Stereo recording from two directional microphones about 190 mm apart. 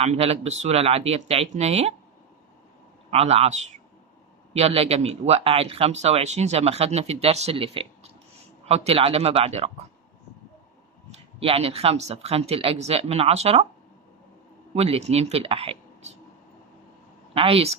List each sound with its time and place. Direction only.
0.0 s speech: 35° right (ahead or behind)
3.1 s speech: 35° right (ahead or behind)
4.5 s speech: 30° right (ahead or behind)
11.1 s speech: 30° right (ahead or behind)
14.8 s speech: 30° right (ahead or behind)
17.3 s speech: 30° right (ahead or behind)